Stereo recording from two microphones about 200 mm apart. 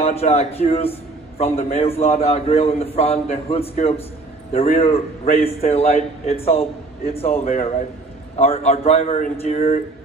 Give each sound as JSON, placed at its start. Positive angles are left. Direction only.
{"t": 0.0, "sound": "a man's voice", "side_deg": 30}